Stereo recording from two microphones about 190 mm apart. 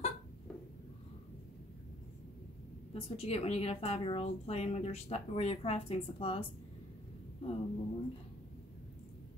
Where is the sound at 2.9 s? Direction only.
30° left (ahead or behind).